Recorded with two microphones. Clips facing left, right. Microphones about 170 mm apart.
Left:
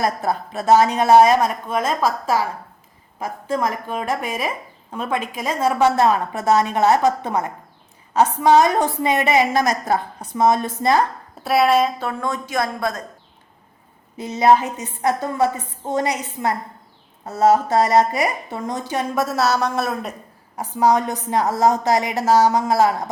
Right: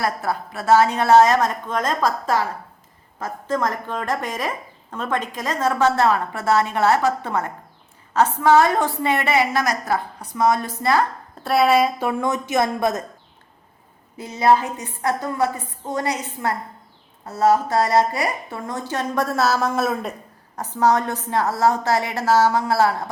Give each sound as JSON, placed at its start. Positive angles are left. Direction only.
{"t": 0.0, "sound": "a woman's voice", "side_deg": 20}
{"t": 11.4, "sound": "speech", "side_deg": 0}
{"t": 14.2, "sound": "a woman's voice", "side_deg": 20}
{"t": 20.6, "sound": "speech", "side_deg": 15}